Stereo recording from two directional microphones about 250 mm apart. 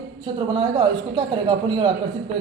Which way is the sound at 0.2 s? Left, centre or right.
Centre.